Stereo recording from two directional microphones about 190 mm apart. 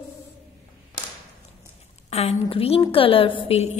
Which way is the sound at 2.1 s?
35° left (ahead or behind).